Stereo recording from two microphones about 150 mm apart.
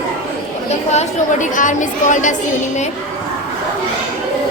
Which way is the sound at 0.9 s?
55° left (ahead or behind).